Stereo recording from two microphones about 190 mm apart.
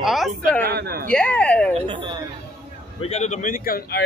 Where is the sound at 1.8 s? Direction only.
25° right (ahead or behind).